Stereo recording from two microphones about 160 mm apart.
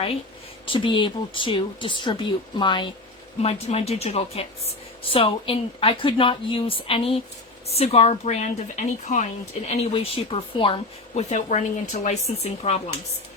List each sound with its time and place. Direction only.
0.7 s speech: 30° left (ahead or behind)
3.4 s speech: 40° left (ahead or behind)
11.1 s speech: 45° left (ahead or behind)